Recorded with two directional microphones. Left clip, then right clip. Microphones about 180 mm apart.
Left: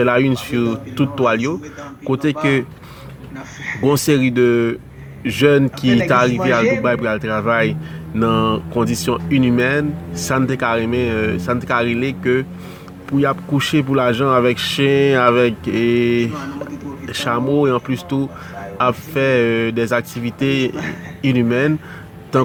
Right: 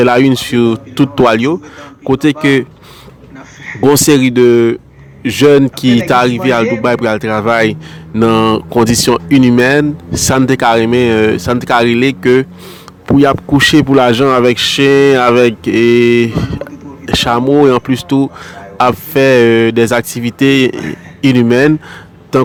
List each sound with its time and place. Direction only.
0.0 s speech: 35° right (ahead or behind)
3.8 s speech: 30° right (ahead or behind)
20.7 s a man's voice: centre (ahead or behind)
21.2 s speech: 35° right (ahead or behind)